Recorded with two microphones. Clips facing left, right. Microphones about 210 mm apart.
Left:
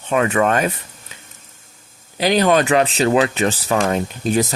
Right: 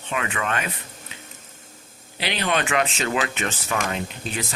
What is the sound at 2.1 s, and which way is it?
Speech, 40° left (ahead or behind).